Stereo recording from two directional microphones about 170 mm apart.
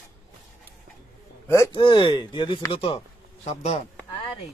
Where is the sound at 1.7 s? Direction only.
30° left (ahead or behind).